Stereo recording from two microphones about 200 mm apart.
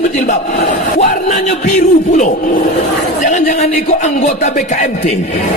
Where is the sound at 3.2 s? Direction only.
35° left (ahead or behind).